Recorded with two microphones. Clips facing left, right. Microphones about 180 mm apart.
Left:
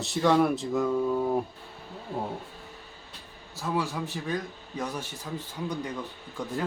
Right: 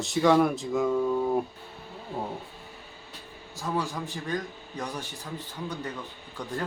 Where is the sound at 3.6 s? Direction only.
5° left (ahead or behind).